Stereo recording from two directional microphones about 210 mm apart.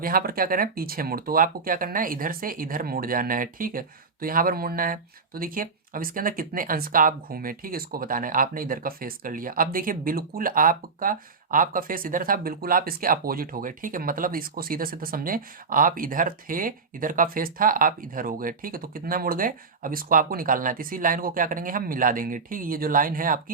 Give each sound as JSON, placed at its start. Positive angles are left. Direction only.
{"t": 0.0, "sound": "speech", "side_deg": -45}